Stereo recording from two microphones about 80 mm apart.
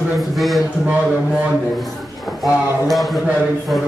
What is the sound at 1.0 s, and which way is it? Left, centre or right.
Speech, centre.